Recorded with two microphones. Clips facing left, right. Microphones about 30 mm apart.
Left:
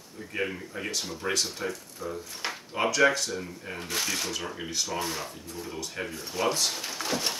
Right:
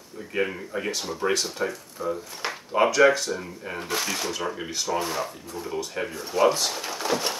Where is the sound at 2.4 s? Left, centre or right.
Centre.